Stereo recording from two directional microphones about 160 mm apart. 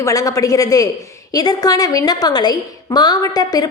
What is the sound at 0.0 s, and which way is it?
A woman's voice, 20° left (ahead or behind).